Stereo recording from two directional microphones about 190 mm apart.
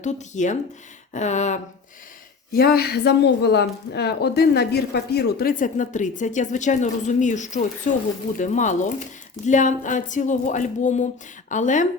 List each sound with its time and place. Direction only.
0.0 s speech: 40° left (ahead or behind)
2.5 s speech: 50° left (ahead or behind)